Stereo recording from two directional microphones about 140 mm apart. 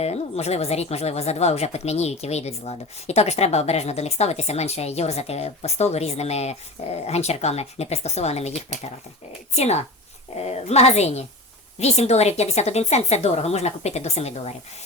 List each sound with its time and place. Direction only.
0.0 s speech: 50° left (ahead or behind)
9.6 s speech: 50° left (ahead or behind)